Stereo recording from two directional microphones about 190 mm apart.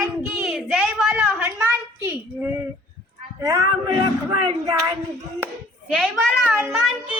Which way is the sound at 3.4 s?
15° right (ahead or behind).